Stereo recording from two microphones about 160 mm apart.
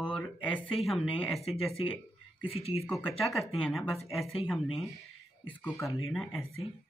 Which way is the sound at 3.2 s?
Centre (ahead or behind).